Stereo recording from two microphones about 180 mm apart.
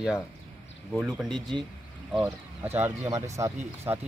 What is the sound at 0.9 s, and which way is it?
Speech, centre (ahead or behind).